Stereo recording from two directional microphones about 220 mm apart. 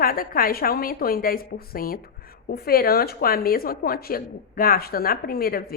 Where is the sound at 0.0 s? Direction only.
40° left (ahead or behind).